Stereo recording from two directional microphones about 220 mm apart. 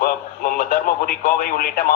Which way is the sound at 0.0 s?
40° left (ahead or behind).